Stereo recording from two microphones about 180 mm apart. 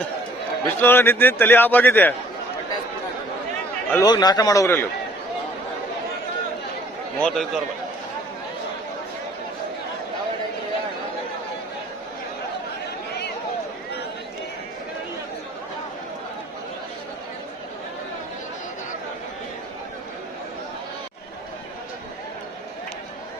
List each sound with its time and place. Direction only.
0.6 s a man's voice: 10° left (ahead or behind)
3.9 s a man's voice: 20° left (ahead or behind)
7.2 s a man's voice: 5° left (ahead or behind)